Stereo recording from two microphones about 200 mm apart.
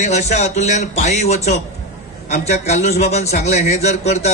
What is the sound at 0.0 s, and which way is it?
A man's voice, 35° left (ahead or behind).